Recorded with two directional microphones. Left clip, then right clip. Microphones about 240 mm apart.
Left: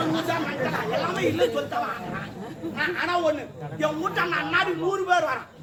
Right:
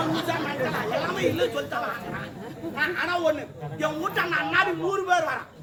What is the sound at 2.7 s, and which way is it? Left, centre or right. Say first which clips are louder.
Speech: left 1 dB; centre.